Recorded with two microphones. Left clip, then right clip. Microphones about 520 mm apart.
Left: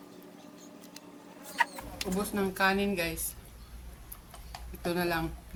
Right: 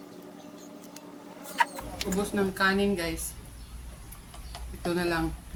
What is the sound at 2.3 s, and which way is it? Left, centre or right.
Speech, left.